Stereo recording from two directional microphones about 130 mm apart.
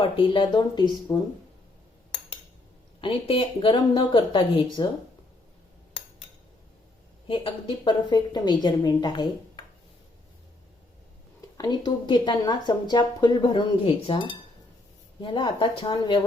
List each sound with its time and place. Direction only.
0.0 s speech: 40° left (ahead or behind)
3.0 s speech: 45° left (ahead or behind)
7.3 s speech: 40° left (ahead or behind)
11.3 s speech: 25° left (ahead or behind)